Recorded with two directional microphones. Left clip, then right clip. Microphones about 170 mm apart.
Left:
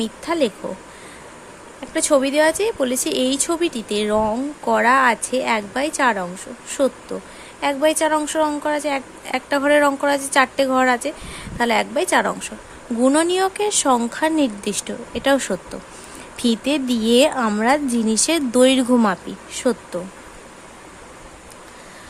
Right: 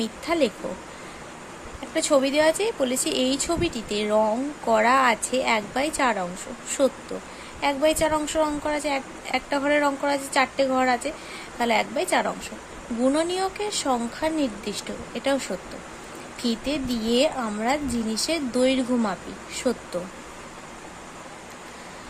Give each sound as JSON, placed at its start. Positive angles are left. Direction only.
{"t": 0.0, "sound": "speech", "side_deg": 20}
{"t": 1.9, "sound": "speech", "side_deg": 20}